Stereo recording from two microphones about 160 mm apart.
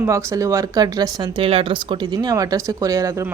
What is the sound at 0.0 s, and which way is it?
Speech, 20° right (ahead or behind).